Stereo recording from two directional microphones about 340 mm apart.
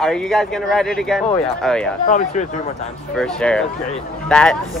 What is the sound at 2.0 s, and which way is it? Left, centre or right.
Speech, left.